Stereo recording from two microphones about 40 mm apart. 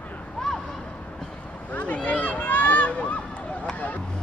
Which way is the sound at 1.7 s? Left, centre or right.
Left.